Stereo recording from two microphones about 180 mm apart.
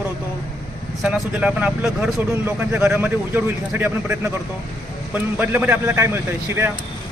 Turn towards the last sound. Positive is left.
turn(degrees=-15)  # may be behind; listen again after turning